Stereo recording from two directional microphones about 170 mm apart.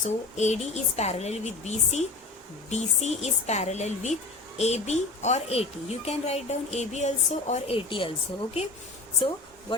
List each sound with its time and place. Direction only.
0.3 s speech: 40° left (ahead or behind)